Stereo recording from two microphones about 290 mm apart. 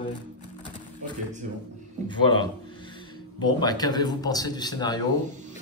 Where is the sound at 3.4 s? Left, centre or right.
Centre.